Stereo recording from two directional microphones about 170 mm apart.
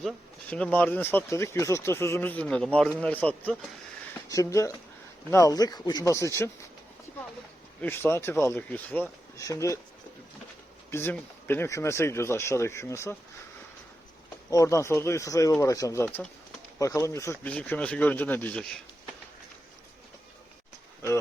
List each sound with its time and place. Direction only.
0.5 s speech: 5° left (ahead or behind)
7.8 s speech: 15° left (ahead or behind)
10.9 s speech: 10° left (ahead or behind)
14.5 s speech: 20° left (ahead or behind)
16.0 s speech: 5° left (ahead or behind)
16.7 s speech: 20° left (ahead or behind)
17.5 s speech: 5° left (ahead or behind)